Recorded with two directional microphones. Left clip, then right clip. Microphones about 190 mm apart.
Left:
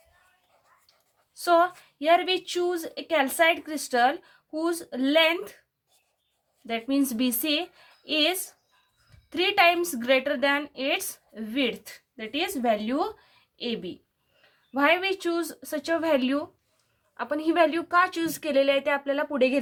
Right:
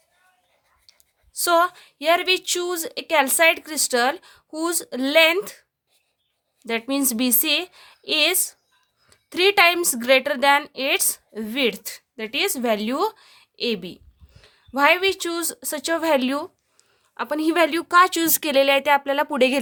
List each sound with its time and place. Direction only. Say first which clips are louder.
0.9 s a woman's voice: right 7 dB; 50° right (ahead or behind)
6.7 s a woman's voice: right 3 dB; 45° right (ahead or behind)